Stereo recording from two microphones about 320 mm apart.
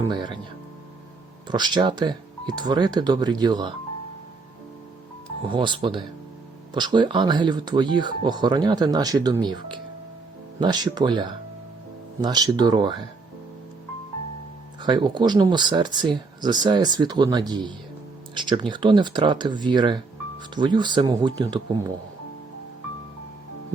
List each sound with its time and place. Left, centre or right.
0.1 s speech: centre
1.5 s speech: centre
5.5 s speech: centre
14.8 s speech: centre